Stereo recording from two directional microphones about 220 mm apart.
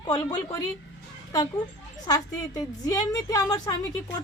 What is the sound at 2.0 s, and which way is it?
A woman's voice, 15° left (ahead or behind).